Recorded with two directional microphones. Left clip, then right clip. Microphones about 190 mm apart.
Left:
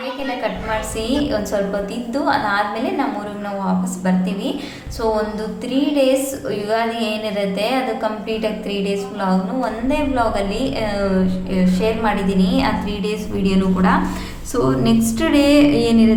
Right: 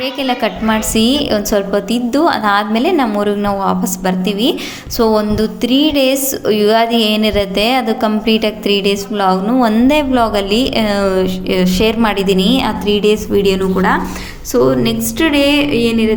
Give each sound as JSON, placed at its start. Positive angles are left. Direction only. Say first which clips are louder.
{"t": 0.4, "sound": "a woman's voice", "louder": "right 6 dB", "side_deg": -50}